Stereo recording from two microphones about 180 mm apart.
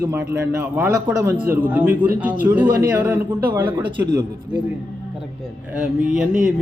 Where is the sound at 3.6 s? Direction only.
25° right (ahead or behind).